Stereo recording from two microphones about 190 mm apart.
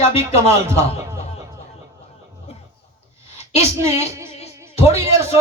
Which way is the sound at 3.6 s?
15° right (ahead or behind).